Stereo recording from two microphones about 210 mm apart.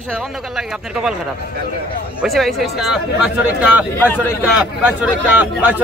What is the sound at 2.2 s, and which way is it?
Speech, centre (ahead or behind).